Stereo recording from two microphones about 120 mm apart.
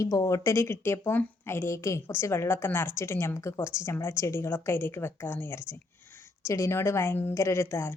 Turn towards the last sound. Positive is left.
turn(degrees=20)  # may be behind; listen again after turning